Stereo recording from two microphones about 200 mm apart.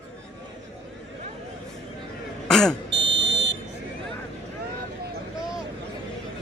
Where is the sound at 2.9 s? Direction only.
65° right (ahead or behind).